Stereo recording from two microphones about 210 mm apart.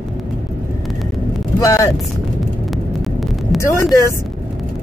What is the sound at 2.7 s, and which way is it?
Vehicle, centre (ahead or behind).